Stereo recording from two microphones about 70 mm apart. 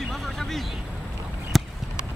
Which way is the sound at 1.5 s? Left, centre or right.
Centre.